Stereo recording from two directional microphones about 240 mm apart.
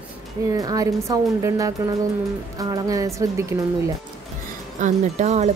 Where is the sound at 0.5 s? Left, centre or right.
Centre.